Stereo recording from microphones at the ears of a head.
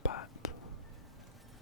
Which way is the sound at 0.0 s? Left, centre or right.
Left.